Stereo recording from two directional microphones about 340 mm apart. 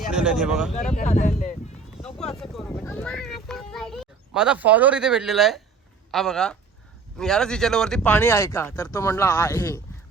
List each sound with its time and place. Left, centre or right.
0.1 s speech: centre
0.9 s speech: left
2.1 s a child's voice: centre